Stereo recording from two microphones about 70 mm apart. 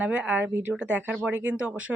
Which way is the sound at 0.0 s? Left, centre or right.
Centre.